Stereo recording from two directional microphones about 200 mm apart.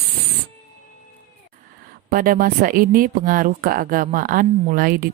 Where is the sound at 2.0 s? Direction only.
45° right (ahead or behind).